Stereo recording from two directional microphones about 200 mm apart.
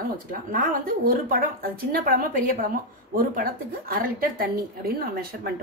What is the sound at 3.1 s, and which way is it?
A woman's voice, 45° right (ahead or behind).